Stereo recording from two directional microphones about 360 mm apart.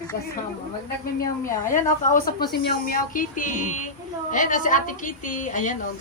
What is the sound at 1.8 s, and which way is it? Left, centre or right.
A woman's voice, left.